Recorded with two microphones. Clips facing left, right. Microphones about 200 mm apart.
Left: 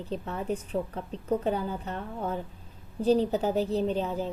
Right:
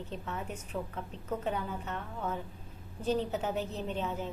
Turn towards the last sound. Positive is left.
turn(degrees=35)  # may be behind; listen again after turning